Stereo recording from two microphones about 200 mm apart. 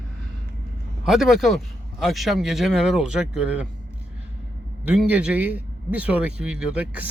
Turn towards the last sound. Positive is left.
turn(degrees=-5)  # may be behind; listen again after turning